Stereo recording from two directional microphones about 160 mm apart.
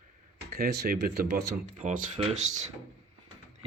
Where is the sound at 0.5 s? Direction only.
75° right (ahead or behind); by 2.7 s 45° right (ahead or behind).